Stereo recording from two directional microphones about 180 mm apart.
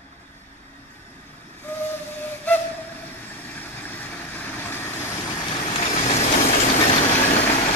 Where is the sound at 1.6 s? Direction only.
10° left (ahead or behind).